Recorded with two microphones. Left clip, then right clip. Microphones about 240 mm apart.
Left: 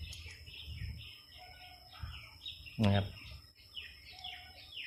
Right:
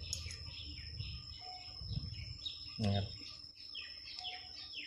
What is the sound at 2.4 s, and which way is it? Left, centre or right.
Bird, centre.